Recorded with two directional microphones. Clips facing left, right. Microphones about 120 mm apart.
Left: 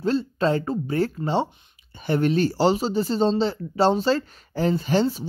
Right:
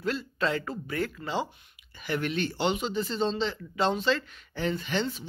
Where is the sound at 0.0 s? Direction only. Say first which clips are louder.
Left 7 dB; 30° left (ahead or behind).